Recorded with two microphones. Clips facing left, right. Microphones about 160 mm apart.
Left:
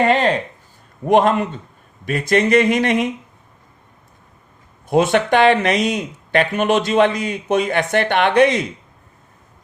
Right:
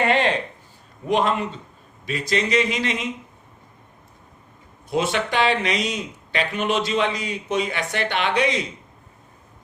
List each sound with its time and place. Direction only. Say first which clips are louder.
0.0 s speech: left 4 dB; 40° left (ahead or behind)
1.0 s speech: left 7 dB; 50° left (ahead or behind)
4.9 s speech: left 8 dB; 50° left (ahead or behind)